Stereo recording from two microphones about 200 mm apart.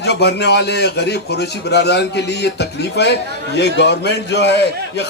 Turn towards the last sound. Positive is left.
turn(degrees=60)  # may be behind; listen again after turning